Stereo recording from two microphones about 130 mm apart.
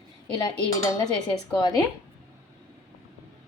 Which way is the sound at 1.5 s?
30° left (ahead or behind).